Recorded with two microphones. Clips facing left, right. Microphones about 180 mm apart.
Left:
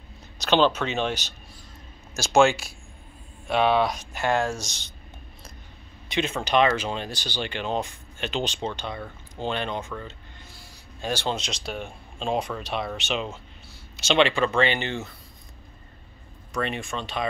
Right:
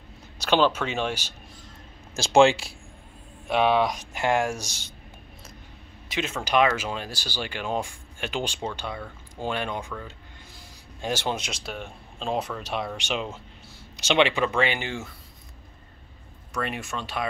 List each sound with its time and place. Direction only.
0.4 s speech: 10° right (ahead or behind)
2.1 s speech: 25° right (ahead or behind)
3.4 s speech: 15° right (ahead or behind)
6.0 s speech: 5° right (ahead or behind)
11.0 s speech: 15° right (ahead or behind)
16.5 s speech: 5° right (ahead or behind)